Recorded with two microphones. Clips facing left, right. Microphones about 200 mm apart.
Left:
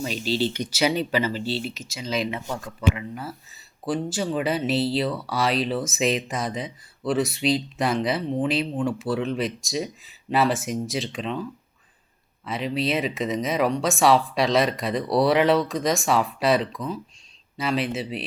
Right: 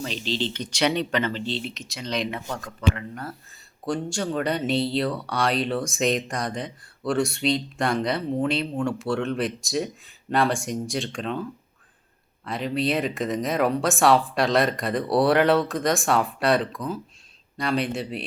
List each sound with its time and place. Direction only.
0.0 s speech: 10° left (ahead or behind)
12.5 s speech: centre (ahead or behind)